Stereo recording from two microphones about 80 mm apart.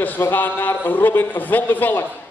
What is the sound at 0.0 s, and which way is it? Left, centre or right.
A man's voice, left.